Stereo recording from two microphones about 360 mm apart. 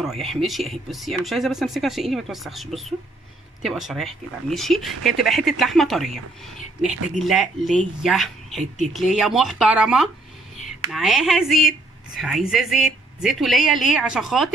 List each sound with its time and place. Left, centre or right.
0.0 s speech: centre